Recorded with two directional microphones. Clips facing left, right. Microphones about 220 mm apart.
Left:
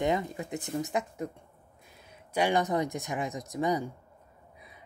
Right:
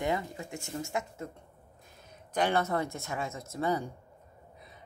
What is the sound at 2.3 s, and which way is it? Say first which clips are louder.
Speech: left 2 dB; 10° left (ahead or behind).